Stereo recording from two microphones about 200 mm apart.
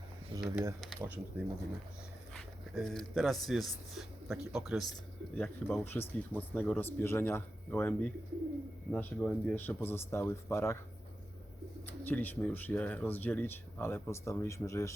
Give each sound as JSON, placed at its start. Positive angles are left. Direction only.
{"t": 0.4, "sound": "speech", "side_deg": -5}
{"t": 11.9, "sound": "speech", "side_deg": 10}